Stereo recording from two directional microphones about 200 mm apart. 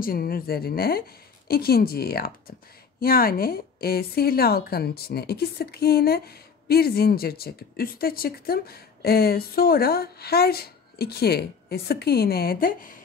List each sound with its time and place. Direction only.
0.0 s a woman's voice: 45° left (ahead or behind)